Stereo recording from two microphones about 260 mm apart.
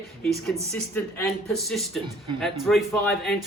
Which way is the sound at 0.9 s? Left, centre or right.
Centre.